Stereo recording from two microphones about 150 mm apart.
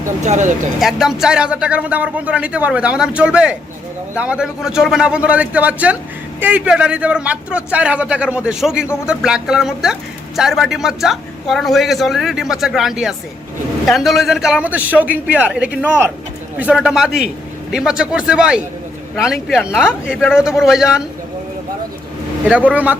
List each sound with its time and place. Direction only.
0.0 s speech: 55° right (ahead or behind)
0.8 s a man's voice: centre (ahead or behind)
20.1 s speech: 15° left (ahead or behind)
20.4 s a man's voice: 5° right (ahead or behind)
22.4 s speech: 10° right (ahead or behind)